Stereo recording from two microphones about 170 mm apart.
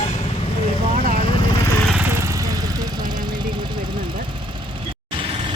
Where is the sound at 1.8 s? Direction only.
Centre (ahead or behind).